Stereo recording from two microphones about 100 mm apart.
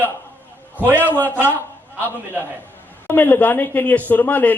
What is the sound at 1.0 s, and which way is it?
Speech, 20° left (ahead or behind).